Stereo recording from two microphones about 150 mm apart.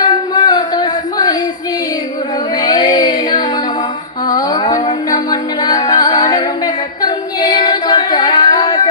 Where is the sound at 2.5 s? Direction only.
25° left (ahead or behind).